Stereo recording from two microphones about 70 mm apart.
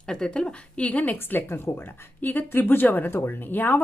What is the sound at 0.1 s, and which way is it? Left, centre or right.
Speech, centre.